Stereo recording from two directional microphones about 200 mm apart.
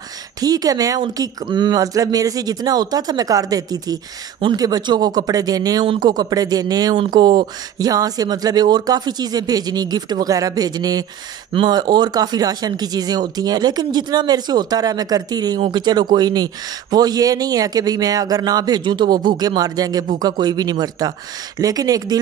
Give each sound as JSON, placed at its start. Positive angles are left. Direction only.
{"t": 0.4, "sound": "speech", "side_deg": -20}